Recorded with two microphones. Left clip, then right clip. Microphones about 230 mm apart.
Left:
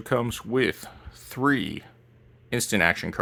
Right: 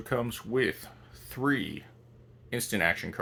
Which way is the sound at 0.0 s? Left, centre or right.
Left.